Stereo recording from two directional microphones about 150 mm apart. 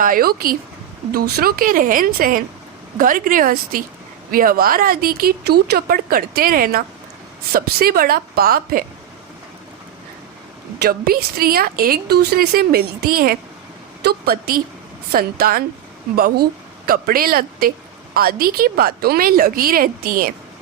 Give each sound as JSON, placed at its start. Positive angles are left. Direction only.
{"t": 0.0, "sound": "a woman's voice", "side_deg": -75}
{"t": 10.8, "sound": "a woman's voice", "side_deg": -85}